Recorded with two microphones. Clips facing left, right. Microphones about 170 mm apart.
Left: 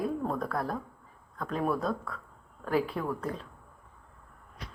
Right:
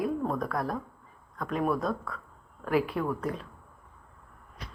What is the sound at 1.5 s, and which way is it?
Speech, 5° right (ahead or behind).